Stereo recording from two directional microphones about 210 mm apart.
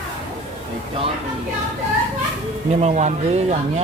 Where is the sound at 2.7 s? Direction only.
30° right (ahead or behind).